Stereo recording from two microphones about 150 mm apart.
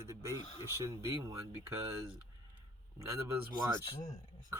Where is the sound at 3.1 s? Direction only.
20° right (ahead or behind).